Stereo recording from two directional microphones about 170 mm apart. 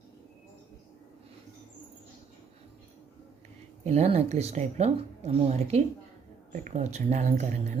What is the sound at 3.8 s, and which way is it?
Speech, 40° right (ahead or behind).